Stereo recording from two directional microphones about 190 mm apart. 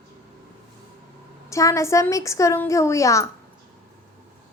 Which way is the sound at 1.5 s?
15° left (ahead or behind).